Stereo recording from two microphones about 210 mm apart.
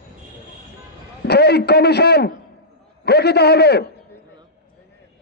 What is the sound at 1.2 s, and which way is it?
A man's voice, 50° left (ahead or behind).